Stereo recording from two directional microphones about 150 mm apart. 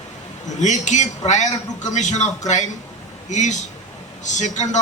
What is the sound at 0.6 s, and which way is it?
A man's voice, 55° left (ahead or behind).